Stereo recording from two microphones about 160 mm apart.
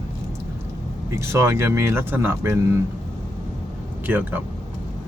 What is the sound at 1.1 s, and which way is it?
Speech, 15° right (ahead or behind).